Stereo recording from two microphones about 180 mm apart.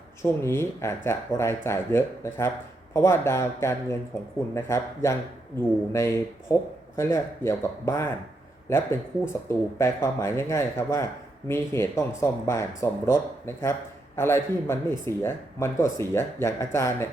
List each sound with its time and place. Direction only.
0.2 s speech: 15° left (ahead or behind)